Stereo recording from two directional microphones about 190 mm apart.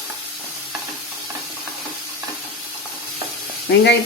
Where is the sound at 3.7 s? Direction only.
60° left (ahead or behind).